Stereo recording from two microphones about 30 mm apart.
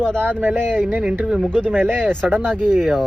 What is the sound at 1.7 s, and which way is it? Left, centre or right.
Speech, right.